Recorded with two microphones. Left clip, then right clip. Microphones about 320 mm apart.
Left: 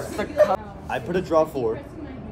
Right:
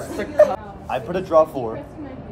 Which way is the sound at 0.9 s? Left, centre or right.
Centre.